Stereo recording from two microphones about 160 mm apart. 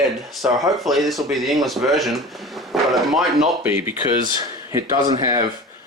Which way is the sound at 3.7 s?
15° right (ahead or behind).